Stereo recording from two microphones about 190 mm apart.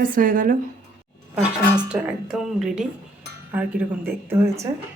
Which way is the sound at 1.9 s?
5° right (ahead or behind).